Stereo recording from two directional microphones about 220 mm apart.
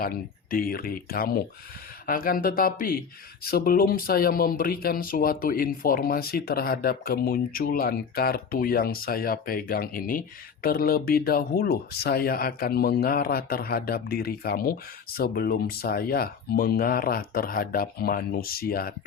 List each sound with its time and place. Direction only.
0.0 s speech: 40° left (ahead or behind)